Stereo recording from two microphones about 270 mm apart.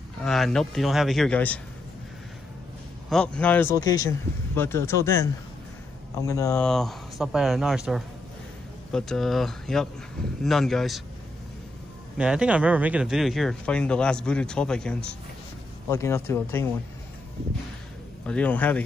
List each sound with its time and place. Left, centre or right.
0.2 s speech: centre
3.1 s a man's voice: centre
12.2 s a man's voice: centre
18.2 s speech: centre